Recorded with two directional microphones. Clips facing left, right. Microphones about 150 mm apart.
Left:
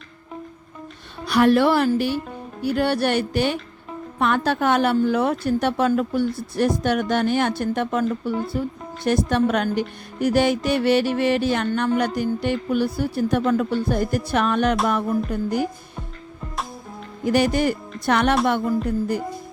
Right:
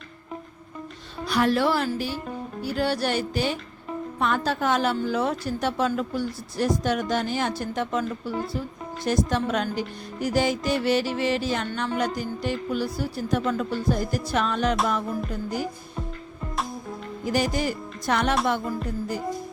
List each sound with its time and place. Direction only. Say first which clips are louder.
1.3 s a woman's voice: left 6 dB; 65° left (ahead or behind)
17.2 s a woman's voice: left 6 dB; 65° left (ahead or behind)